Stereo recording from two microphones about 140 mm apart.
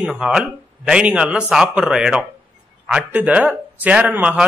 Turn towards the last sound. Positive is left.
turn(degrees=-10)  # may be behind; listen again after turning